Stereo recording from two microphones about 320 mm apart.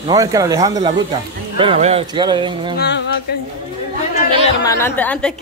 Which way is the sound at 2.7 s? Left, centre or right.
Left.